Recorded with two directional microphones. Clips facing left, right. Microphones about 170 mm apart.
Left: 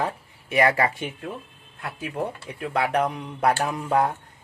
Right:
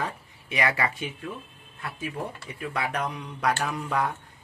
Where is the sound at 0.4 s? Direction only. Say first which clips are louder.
Left 6 dB; 50° left (ahead or behind).